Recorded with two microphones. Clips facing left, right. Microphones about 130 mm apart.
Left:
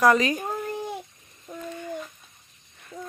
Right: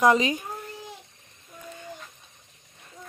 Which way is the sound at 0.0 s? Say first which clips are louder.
Left 1 dB; 20° right (ahead or behind).